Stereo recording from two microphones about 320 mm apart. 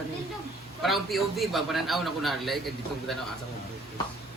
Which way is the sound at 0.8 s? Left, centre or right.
Centre.